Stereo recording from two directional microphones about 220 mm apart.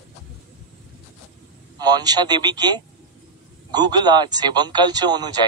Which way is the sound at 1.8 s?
20° right (ahead or behind).